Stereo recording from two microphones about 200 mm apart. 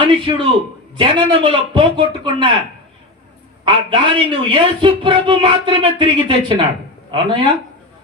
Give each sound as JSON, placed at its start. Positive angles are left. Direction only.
{"t": 0.0, "sound": "a man's voice", "side_deg": -25}
{"t": 3.7, "sound": "a man's voice", "side_deg": -25}